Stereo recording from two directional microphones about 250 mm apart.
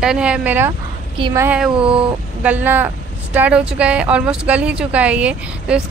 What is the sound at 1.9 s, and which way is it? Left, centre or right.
Speech, right.